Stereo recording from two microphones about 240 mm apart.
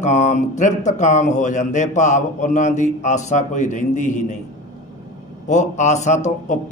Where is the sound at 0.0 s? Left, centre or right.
Left.